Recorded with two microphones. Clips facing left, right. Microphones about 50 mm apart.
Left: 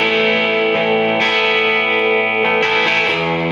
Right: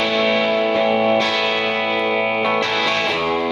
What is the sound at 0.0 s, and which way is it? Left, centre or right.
Music, left.